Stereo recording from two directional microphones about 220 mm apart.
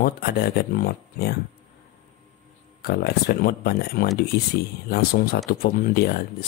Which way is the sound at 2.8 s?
45° left (ahead or behind).